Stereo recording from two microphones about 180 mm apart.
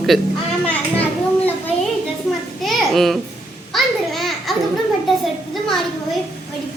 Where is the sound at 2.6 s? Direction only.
Centre (ahead or behind).